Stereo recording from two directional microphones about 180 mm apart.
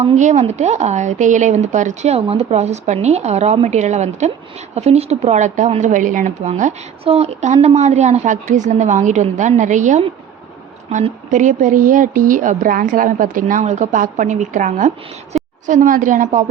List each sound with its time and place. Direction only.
0.0 s speech: 40° right (ahead or behind)